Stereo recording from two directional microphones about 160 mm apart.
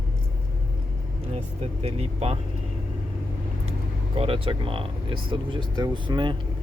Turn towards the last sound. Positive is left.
turn(degrees=-30)  # may be behind; listen again after turning